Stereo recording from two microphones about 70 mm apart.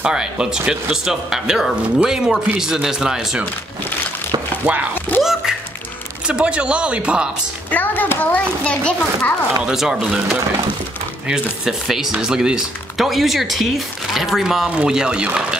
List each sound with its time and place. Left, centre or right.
0.0 s speech: centre
4.6 s speech: centre
6.2 s speech: centre
7.7 s a child's voice: left
9.6 s speech: centre